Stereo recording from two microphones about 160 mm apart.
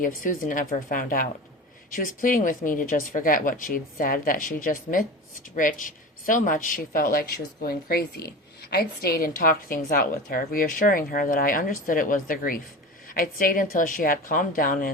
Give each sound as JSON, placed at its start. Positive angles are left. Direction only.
{"t": 0.0, "sound": "speech", "side_deg": 60}